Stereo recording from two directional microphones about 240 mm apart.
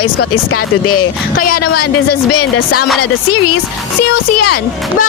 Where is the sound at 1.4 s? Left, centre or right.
Left.